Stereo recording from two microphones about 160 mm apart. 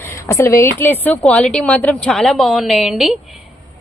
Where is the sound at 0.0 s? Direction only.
20° left (ahead or behind); by 3.2 s centre (ahead or behind).